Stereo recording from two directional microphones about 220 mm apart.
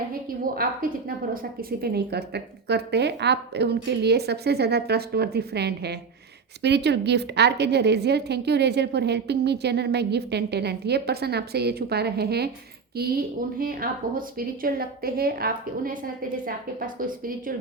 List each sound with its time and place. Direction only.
0.4 s a woman's voice: 40° right (ahead or behind)